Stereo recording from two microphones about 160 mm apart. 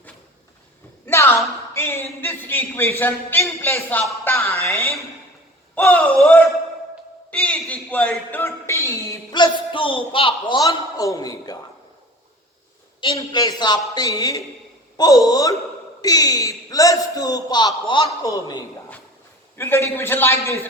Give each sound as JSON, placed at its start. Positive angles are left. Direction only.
{"t": 1.0, "sound": "a sound", "side_deg": 15}
{"t": 3.0, "sound": "a man's voice", "side_deg": 15}
{"t": 13.0, "sound": "a man's voice", "side_deg": 30}
{"t": 19.5, "sound": "speech", "side_deg": 15}